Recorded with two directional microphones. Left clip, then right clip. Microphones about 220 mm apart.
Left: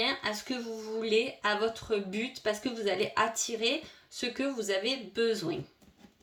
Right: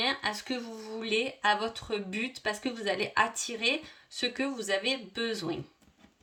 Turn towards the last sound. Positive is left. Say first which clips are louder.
# left 4 dB
turn(degrees=-35)  # may be behind; listen again after turning